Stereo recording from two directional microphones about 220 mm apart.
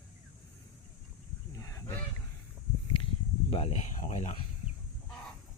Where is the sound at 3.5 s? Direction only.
25° left (ahead or behind).